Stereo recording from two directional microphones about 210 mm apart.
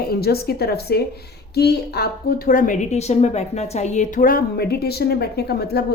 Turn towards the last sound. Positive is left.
turn(degrees=50)  # may be behind; listen again after turning